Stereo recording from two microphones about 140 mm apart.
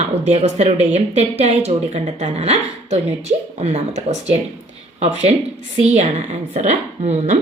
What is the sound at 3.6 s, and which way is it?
Speech, 50° right (ahead or behind).